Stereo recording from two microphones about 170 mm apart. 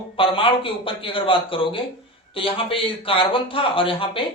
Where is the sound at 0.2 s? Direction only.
30° left (ahead or behind).